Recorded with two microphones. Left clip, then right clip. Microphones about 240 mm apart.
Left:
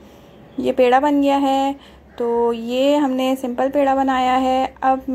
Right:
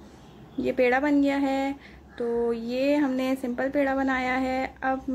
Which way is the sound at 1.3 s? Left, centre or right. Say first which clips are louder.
Left 9 dB; centre.